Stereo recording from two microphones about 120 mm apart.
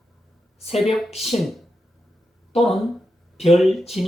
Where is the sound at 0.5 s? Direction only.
60° left (ahead or behind).